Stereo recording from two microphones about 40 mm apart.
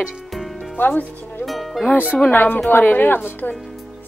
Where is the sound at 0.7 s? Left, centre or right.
Left.